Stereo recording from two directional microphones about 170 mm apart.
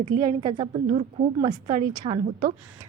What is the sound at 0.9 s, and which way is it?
A woman's voice, 40° right (ahead or behind).